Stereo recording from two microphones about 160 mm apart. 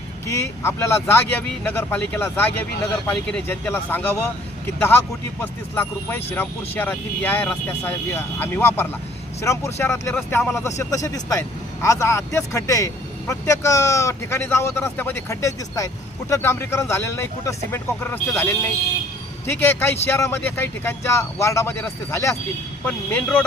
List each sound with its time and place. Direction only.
0.3 s speech: 15° left (ahead or behind)